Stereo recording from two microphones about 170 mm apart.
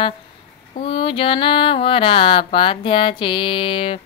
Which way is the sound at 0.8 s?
30° left (ahead or behind).